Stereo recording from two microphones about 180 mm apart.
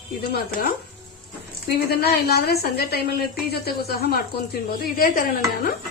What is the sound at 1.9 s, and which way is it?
A woman's voice, 60° left (ahead or behind).